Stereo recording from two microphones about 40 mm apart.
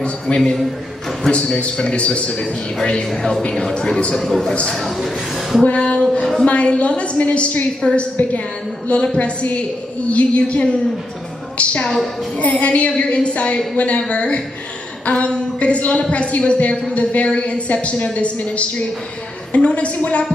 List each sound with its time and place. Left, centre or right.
0.3 s a man's voice: left
3.1 s a man's voice: centre
3.7 s a man's voice: left
4.1 s a man's voice: centre
5.7 s a sound: left
6.4 s a woman's voice: left
11.5 s music: left
12.4 s a woman's voice: left